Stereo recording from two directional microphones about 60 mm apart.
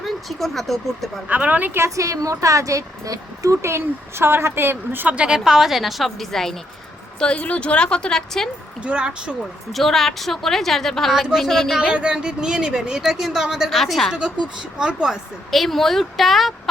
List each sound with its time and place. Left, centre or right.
0.0 s a woman's voice: centre
1.3 s speech: right
2.0 s speech: right
3.6 s speech: right
5.0 s speech: centre
5.5 s a woman's voice: centre
7.2 s a woman's voice: centre
8.8 s speech: centre
9.7 s a woman's voice: centre
11.1 s a woman's voice: centre
11.8 s a woman's voice: centre
14.1 s a woman's voice: centre
15.4 s a woman's voice: centre